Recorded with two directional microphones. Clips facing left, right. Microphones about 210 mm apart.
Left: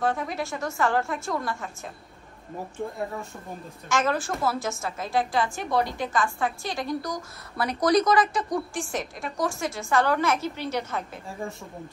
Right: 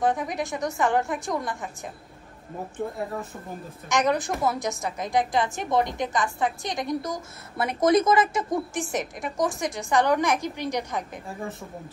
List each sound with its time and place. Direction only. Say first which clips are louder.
0.0 s a woman's voice: right 2 dB; 15° right (ahead or behind)
3.0 s a woman's voice: right 1 dB; centre (ahead or behind)
3.9 s a woman's voice: right 2 dB; 15° right (ahead or behind)